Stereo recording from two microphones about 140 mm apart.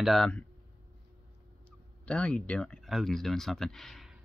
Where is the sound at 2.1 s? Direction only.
10° left (ahead or behind).